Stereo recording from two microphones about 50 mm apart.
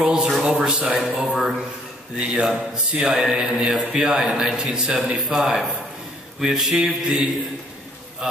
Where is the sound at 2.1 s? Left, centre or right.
Right.